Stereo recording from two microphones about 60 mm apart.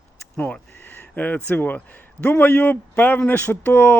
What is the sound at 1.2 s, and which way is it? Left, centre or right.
Speech, left.